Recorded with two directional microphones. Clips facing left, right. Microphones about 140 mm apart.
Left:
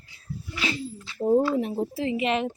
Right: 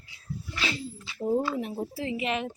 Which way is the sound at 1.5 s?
30° left (ahead or behind).